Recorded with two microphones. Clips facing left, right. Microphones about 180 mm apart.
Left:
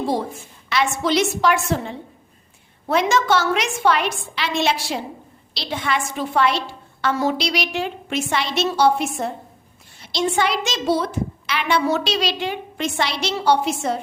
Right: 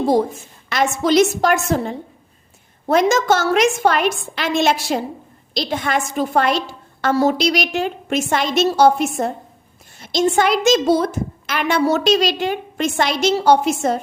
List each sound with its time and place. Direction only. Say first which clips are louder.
0.0 s a woman's voice: right 6 dB; 45° right (ahead or behind)